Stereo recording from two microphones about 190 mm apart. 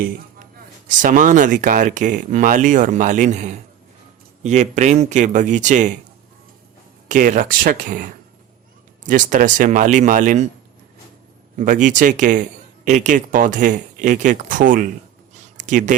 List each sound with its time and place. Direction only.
0.9 s a man's voice: 40° right (ahead or behind)
7.1 s a man's voice: 45° right (ahead or behind)
11.5 s a man's voice: 40° right (ahead or behind)
15.5 s a sound: 40° right (ahead or behind)